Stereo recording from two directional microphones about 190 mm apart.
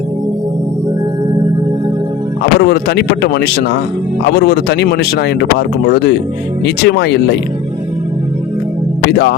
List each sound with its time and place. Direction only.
2.4 s speech: 60° left (ahead or behind)
9.0 s speech: 60° left (ahead or behind)